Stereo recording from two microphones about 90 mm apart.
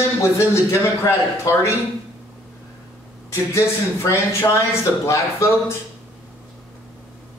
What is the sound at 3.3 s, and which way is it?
A man's voice, 30° left (ahead or behind).